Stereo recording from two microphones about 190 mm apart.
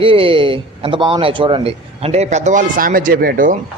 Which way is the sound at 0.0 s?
30° right (ahead or behind).